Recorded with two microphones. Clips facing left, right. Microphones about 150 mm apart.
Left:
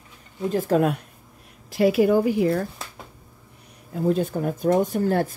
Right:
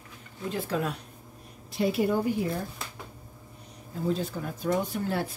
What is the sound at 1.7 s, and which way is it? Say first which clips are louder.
Speech: left 8 dB; 80° left.